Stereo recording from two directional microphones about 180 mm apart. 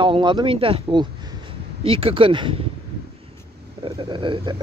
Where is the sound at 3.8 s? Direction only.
25° right (ahead or behind).